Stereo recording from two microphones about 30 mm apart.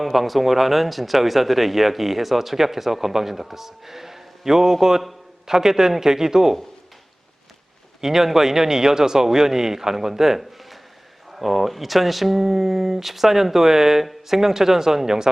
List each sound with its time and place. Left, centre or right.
0.0 s speech: centre
8.0 s speech: centre